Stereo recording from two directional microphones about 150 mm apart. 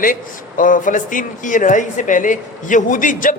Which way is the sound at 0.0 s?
65° left (ahead or behind).